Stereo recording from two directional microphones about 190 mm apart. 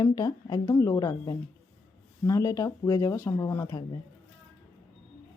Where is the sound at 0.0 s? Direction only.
20° left (ahead or behind).